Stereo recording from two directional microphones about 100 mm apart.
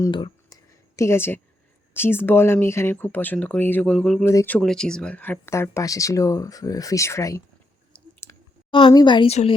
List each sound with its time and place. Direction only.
0.5 s a sound: 30° left (ahead or behind)
1.9 s speech: 25° left (ahead or behind); by 4.2 s 5° left (ahead or behind)
4.2 s speech: 30° left (ahead or behind)
4.6 s speech: 5° left (ahead or behind)
5.5 s speech: 25° left (ahead or behind)
7.9 s a sound: 10° left (ahead or behind)
8.9 s a woman's voice: 45° left (ahead or behind)
9.2 s speech: 85° left